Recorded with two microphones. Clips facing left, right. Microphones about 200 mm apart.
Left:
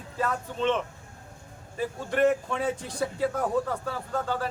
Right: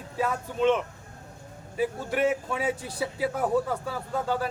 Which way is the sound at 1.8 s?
5° right (ahead or behind).